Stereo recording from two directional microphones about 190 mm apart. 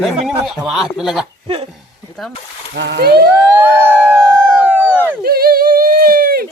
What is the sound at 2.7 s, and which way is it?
Speech, 65° right (ahead or behind).